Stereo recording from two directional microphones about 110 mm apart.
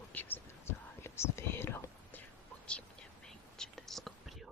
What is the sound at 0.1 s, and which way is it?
Whispering, 15° left (ahead or behind).